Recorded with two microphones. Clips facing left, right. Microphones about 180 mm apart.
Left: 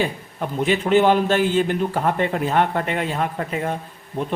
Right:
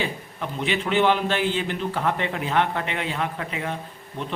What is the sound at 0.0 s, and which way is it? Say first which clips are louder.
A man's voice: left 5 dB; 45° left (ahead or behind).